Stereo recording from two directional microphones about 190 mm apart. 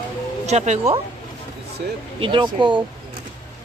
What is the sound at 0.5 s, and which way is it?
Speech, 35° right (ahead or behind).